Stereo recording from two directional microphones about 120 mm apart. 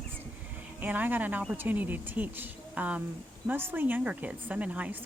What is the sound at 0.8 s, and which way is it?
A woman's voice, 15° right (ahead or behind).